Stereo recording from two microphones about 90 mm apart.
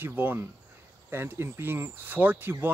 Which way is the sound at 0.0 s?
20° right (ahead or behind).